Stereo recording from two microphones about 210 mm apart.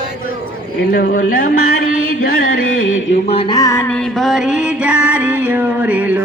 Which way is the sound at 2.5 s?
75° left (ahead or behind).